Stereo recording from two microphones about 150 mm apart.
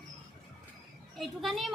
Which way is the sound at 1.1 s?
Centre (ahead or behind).